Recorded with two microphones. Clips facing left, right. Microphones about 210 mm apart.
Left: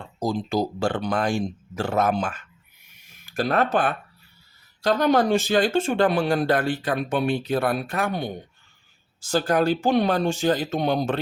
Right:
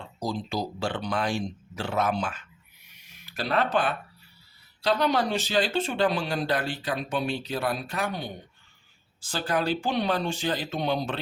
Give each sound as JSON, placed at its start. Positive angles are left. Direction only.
{"t": 0.2, "sound": "speech", "side_deg": 45}
{"t": 3.0, "sound": "a sound", "side_deg": 45}
{"t": 4.8, "sound": "speech", "side_deg": 45}